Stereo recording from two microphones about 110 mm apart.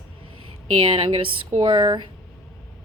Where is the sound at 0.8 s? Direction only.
50° right (ahead or behind).